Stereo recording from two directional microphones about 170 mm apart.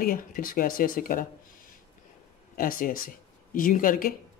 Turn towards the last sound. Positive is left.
turn(degrees=55)  # may be behind; listen again after turning